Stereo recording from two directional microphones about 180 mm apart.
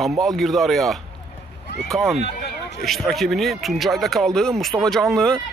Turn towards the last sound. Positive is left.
turn(degrees=0)  # may be behind; listen again after turning